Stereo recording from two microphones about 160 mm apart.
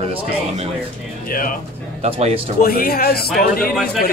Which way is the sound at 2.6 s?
70° left (ahead or behind).